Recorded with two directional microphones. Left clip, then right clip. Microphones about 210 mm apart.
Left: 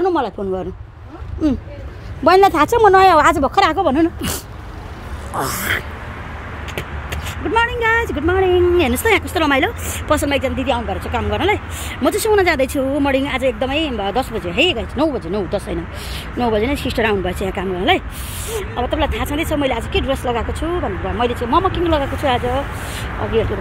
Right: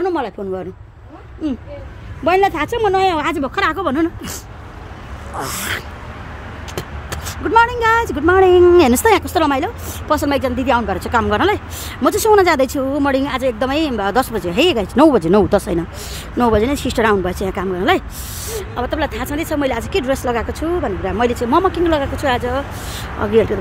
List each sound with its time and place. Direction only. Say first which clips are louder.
0.0 s a sound: left 2 dB; centre (ahead or behind)
1.4 s speech: left 4 dB; 20° left (ahead or behind); by 4.1 s 5° left (ahead or behind)
5.3 s speech: left 3 dB; 15° left (ahead or behind)
7.5 s speech: right 3 dB; 20° right (ahead or behind)
9.6 s speech: left 3 dB; 10° right (ahead or behind)
10.2 s speech: right 1 dB; 25° right (ahead or behind)
11.4 s speech: right 1 dB; 20° right (ahead or behind)
13.6 s speech: right 2 dB; 30° right (ahead or behind)
15.0 s speech: right 8 dB; 50° right (ahead or behind); by 19.5 s 10° right (ahead or behind)
19.5 s speech: right 2 dB; 20° right (ahead or behind)
22.2 s speech: even; 10° right (ahead or behind)